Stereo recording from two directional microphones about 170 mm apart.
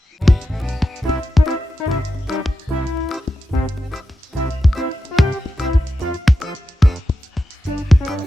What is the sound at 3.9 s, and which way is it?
Music, centre (ahead or behind).